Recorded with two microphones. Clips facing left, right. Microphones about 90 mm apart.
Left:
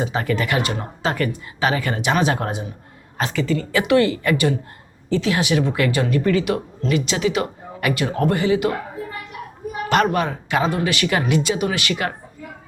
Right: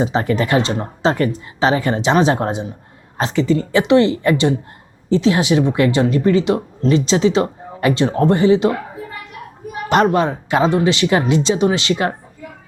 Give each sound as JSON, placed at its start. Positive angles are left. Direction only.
{"t": 0.0, "sound": "speech", "side_deg": -25}
{"t": 9.9, "sound": "speech", "side_deg": -25}